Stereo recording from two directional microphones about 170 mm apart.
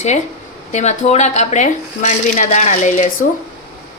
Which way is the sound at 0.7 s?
40° left (ahead or behind).